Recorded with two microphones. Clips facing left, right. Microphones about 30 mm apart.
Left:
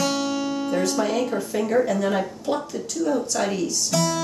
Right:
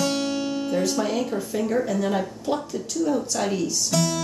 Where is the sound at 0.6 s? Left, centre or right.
Centre.